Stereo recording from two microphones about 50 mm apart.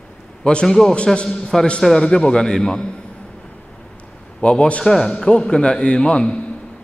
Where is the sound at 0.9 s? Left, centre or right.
Left.